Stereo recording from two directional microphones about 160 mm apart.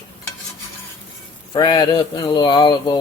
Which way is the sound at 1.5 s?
25° left (ahead or behind).